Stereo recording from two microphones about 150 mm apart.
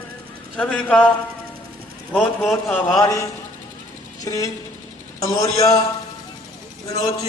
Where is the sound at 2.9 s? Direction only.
20° left (ahead or behind).